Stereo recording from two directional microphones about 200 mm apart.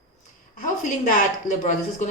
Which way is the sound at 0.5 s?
40° left (ahead or behind).